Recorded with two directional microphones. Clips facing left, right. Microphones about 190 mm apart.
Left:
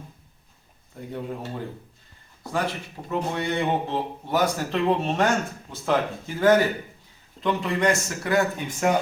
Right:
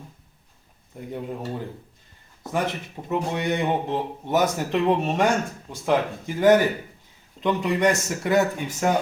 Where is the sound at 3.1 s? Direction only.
15° right (ahead or behind).